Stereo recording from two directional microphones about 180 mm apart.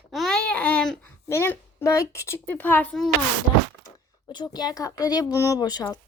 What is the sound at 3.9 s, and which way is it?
Speech, 25° left (ahead or behind).